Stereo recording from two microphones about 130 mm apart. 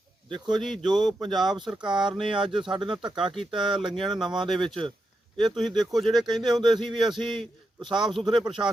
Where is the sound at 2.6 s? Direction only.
40° right (ahead or behind).